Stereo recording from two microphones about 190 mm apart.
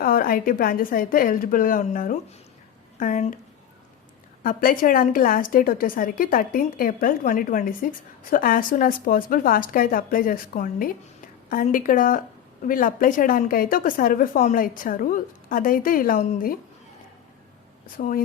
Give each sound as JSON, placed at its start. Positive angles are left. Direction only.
{"t": 0.0, "sound": "a woman's voice", "side_deg": 50}
{"t": 4.4, "sound": "a woman's voice", "side_deg": 45}
{"t": 17.9, "sound": "a woman's voice", "side_deg": 50}